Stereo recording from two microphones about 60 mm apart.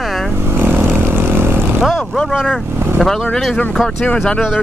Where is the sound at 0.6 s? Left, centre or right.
Right.